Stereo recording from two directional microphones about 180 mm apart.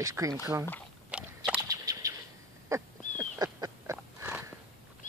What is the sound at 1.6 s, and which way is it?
Bird, 20° right (ahead or behind).